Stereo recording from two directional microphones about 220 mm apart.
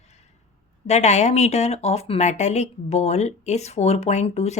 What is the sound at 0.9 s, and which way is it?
Speech, 30° left (ahead or behind).